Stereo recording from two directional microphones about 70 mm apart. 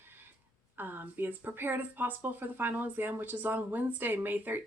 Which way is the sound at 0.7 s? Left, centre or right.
Right.